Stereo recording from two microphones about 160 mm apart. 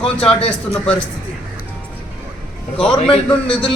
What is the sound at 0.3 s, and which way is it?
Speech, 40° left (ahead or behind).